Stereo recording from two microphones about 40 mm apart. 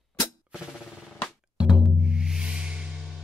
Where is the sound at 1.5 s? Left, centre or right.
Right.